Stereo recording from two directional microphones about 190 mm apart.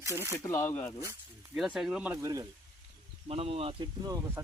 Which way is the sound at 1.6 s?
Centre (ahead or behind).